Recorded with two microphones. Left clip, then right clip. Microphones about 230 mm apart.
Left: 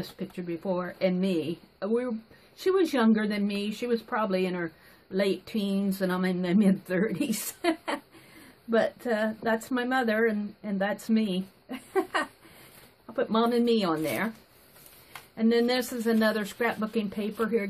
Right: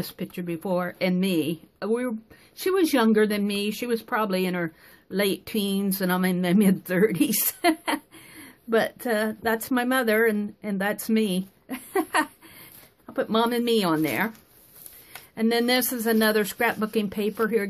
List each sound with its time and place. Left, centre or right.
0.5 s speech: right
15.3 s speech: right